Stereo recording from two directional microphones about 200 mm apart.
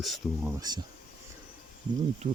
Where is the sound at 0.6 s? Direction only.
20° right (ahead or behind).